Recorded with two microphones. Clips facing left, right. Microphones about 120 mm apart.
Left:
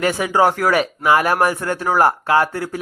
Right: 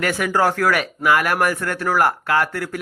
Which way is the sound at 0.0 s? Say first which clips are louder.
Left 3 dB; 20° left (ahead or behind).